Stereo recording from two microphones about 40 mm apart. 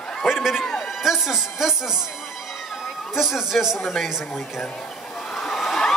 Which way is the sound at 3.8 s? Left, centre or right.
Centre.